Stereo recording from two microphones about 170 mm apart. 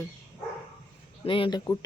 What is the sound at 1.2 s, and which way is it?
Speech, 30° left (ahead or behind).